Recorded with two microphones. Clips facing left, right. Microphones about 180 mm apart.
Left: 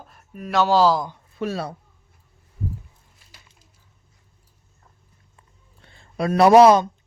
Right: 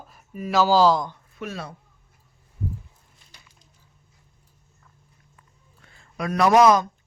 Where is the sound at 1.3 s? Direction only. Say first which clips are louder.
Left 12 dB; 35° left (ahead or behind).